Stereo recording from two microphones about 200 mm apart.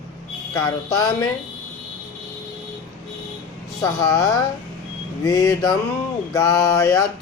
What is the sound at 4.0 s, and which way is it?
Speech, 15° left (ahead or behind).